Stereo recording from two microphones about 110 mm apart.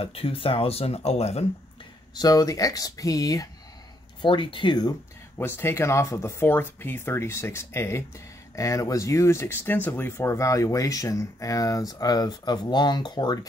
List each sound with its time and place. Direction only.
0.0 s speech: 55° left (ahead or behind)
2.1 s speech: 35° left (ahead or behind)
4.2 s speech: 50° left (ahead or behind)
5.4 s speech: 25° left (ahead or behind); by 13.5 s 40° left (ahead or behind)